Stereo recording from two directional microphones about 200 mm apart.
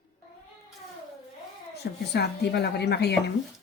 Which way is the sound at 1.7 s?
55° left (ahead or behind).